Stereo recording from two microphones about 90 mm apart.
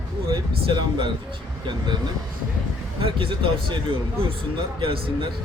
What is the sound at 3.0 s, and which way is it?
Speech, 80° right.